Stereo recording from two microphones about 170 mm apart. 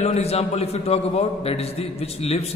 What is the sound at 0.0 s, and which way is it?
A man's voice, 40° left (ahead or behind).